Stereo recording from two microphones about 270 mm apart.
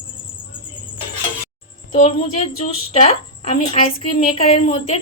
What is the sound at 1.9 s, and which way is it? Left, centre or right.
A woman's voice, left.